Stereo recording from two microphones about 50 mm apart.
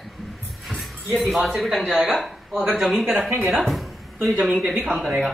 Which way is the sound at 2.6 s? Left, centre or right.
Centre.